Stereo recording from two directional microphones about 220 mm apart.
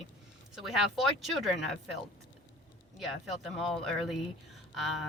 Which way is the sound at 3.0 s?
Centre (ahead or behind).